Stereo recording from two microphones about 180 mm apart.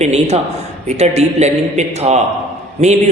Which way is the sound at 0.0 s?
40° right (ahead or behind).